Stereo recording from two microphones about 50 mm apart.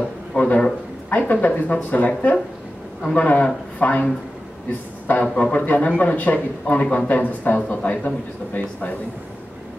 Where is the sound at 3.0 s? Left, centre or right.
Centre.